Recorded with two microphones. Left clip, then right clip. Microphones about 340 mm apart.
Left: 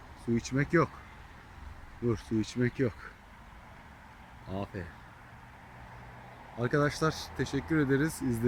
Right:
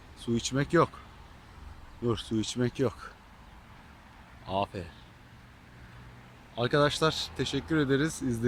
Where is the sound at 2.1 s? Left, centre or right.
Centre.